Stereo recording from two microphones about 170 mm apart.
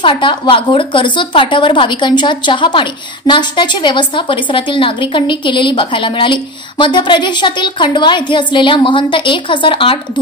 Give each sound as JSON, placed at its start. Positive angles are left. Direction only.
{"t": 0.0, "sound": "a woman's voice", "side_deg": 30}